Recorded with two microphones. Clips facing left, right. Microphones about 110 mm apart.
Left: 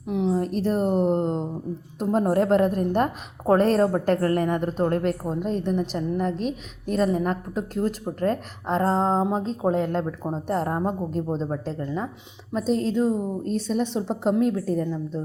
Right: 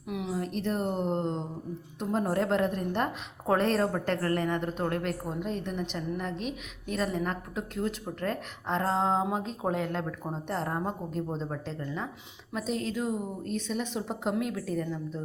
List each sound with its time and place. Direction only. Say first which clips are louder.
0.1 s a woman's voice: left 9 dB; 30° left (ahead or behind)
10.5 s a woman's voice: left 7 dB; 45° left (ahead or behind)